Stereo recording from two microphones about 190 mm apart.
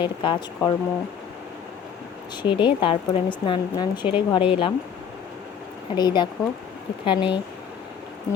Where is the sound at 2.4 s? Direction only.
25° left (ahead or behind).